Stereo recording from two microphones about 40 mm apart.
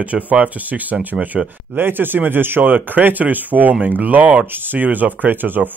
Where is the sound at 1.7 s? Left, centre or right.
Right.